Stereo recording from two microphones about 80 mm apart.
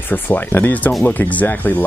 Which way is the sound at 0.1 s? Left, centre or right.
Left.